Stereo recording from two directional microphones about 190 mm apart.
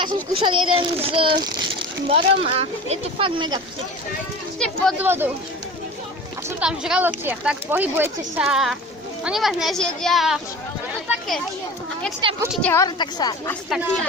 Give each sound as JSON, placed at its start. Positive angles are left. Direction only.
{"t": 0.0, "sound": "a child's voice", "side_deg": -25}
{"t": 4.6, "sound": "speech", "side_deg": 5}
{"t": 4.9, "sound": "speech", "side_deg": -10}
{"t": 6.6, "sound": "speech", "side_deg": -5}
{"t": 12.2, "sound": "a child's voice", "side_deg": -25}
{"t": 12.6, "sound": "a woman's voice", "side_deg": 15}
{"t": 13.7, "sound": "speech", "side_deg": 0}